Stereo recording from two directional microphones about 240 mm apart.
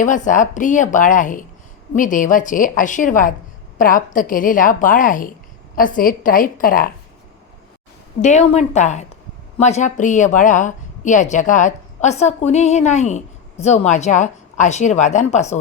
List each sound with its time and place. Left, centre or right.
0.0 s a woman's voice: left
8.2 s a woman's voice: left